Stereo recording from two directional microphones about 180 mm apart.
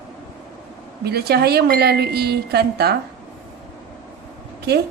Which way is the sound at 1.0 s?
60° right (ahead or behind).